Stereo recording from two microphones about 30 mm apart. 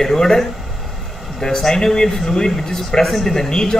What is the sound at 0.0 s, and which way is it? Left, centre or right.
Speech, centre.